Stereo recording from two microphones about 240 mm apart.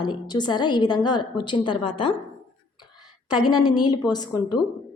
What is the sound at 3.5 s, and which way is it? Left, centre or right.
Speech, centre.